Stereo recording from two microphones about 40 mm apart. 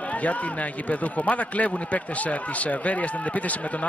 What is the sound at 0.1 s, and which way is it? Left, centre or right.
A man's voice, left.